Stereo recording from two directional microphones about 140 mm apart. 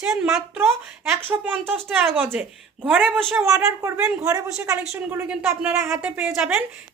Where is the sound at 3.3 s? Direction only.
20° right (ahead or behind).